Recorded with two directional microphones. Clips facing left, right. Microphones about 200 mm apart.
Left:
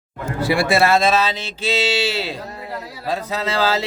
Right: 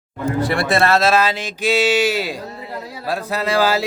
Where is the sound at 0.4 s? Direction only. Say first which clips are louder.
Left 2 dB; 5° left (ahead or behind).